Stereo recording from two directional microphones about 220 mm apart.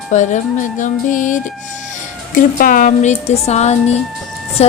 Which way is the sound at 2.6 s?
40° left (ahead or behind).